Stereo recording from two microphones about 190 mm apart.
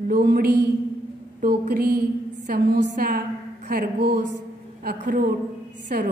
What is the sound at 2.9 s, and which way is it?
A woman's voice, 50° right (ahead or behind).